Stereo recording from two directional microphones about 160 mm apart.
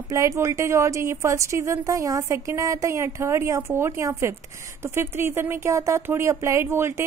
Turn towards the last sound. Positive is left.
turn(degrees=-15)  # may be behind; listen again after turning